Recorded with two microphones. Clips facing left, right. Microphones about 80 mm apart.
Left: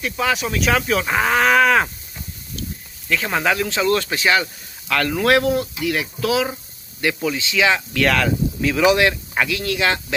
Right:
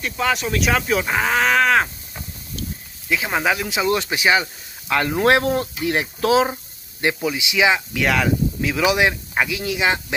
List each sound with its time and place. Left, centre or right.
0.0 s speech: centre
3.1 s speech: centre; by 6.5 s right
7.2 s speech: centre